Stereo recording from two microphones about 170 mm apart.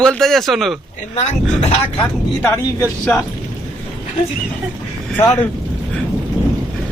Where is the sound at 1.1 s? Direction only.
40° left (ahead or behind).